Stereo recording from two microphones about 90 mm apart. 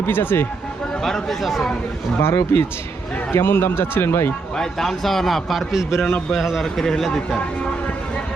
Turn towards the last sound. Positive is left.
turn(degrees=5)  # may be behind; listen again after turning